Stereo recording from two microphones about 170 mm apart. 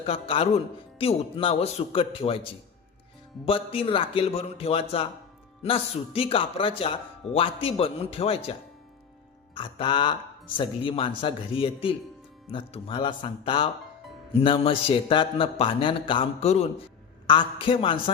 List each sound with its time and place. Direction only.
0.0 s a man's voice: 35° left (ahead or behind)
9.6 s a man's voice: 30° left (ahead or behind)